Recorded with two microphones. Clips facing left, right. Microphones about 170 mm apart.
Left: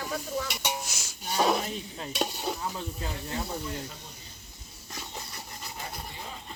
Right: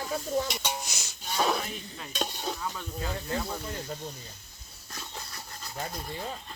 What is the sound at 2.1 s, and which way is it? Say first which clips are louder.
Speech: left 2 dB; 10° left (ahead or behind).